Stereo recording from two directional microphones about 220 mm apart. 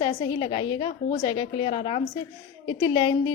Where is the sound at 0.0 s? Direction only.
20° left (ahead or behind).